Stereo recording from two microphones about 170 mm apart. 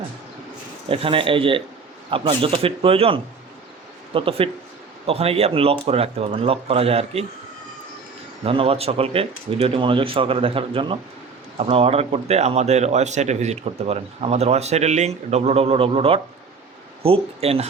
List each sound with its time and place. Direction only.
0.9 s speech: 30° right (ahead or behind)
8.4 s speech: 35° right (ahead or behind)